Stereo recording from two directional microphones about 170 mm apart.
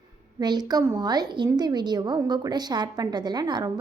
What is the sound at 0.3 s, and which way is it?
A woman's voice, 25° right (ahead or behind).